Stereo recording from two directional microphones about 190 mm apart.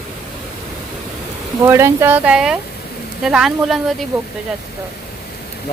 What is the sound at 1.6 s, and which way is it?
Speech, 15° right (ahead or behind).